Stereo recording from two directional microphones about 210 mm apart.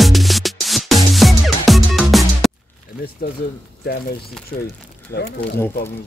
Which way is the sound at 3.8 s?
50° left (ahead or behind).